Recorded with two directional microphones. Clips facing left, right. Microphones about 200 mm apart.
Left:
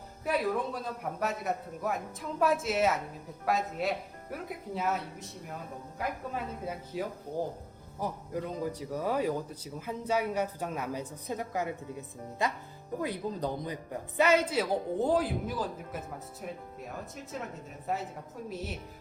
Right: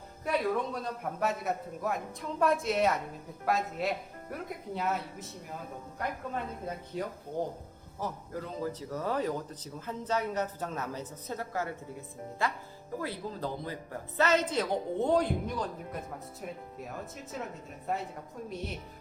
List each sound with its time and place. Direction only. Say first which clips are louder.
0.3 s a woman's voice: even; centre (ahead or behind)
18.4 s a woman's voice: left 1 dB; centre (ahead or behind)